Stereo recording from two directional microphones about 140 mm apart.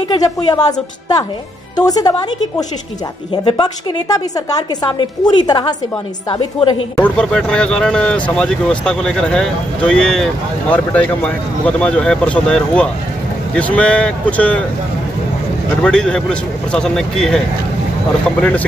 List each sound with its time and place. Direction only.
0.1 s a woman's voice: 30° left (ahead or behind)
3.4 s a woman's voice: 30° left (ahead or behind)
7.0 s speech: 5° left (ahead or behind)
15.8 s speech: 5° left (ahead or behind)